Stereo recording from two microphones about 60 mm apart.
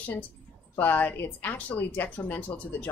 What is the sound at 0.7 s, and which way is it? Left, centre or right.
A woman's voice, left.